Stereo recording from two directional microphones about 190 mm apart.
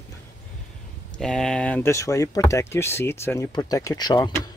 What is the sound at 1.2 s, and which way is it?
Speech, 5° left (ahead or behind).